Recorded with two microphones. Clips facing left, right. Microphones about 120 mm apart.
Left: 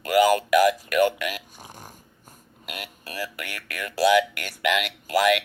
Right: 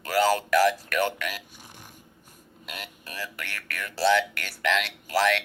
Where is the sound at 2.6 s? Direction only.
5° left (ahead or behind).